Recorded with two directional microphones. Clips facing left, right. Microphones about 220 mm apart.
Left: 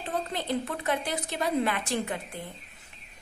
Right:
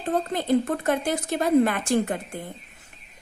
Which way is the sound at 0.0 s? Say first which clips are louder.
Right 7 dB; 45° right (ahead or behind).